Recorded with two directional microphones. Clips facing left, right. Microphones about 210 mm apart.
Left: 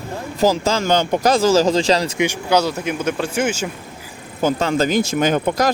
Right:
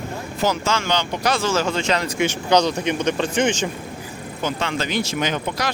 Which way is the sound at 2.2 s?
10° left (ahead or behind).